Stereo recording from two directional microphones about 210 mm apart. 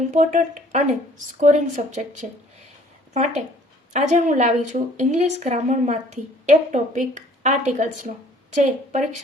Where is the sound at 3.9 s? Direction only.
35° right (ahead or behind).